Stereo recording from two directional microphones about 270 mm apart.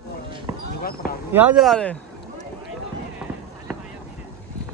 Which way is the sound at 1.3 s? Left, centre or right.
Centre.